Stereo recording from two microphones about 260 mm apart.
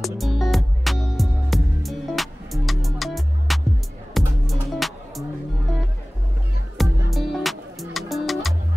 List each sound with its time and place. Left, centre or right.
0.0 s music: centre
7.1 s music: centre